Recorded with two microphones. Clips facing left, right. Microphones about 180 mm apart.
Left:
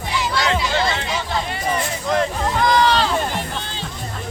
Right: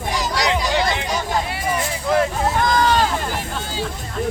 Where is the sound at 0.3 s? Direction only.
15° right (ahead or behind).